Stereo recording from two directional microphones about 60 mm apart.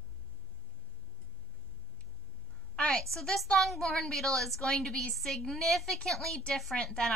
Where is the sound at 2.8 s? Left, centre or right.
Centre.